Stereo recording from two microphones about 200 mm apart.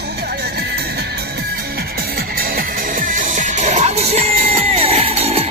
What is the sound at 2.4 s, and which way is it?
Music, 45° right (ahead or behind).